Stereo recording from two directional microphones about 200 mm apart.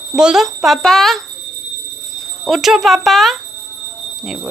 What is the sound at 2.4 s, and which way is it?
Speech, centre (ahead or behind).